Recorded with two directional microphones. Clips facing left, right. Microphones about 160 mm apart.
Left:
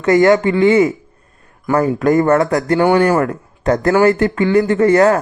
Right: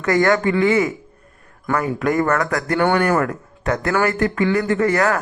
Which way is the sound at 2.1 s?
25° left (ahead or behind).